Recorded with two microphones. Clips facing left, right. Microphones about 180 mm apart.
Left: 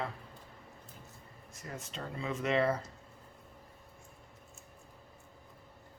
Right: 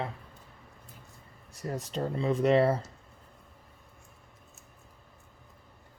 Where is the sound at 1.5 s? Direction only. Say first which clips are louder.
Right 10 dB; 35° right (ahead or behind).